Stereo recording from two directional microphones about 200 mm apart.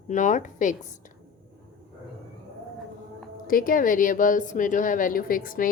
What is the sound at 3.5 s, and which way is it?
A woman's voice, 45° left (ahead or behind).